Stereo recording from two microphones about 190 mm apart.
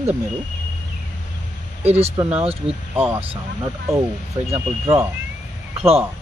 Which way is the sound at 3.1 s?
30° right (ahead or behind).